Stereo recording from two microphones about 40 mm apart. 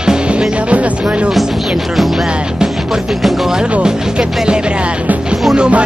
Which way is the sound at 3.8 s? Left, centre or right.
Centre.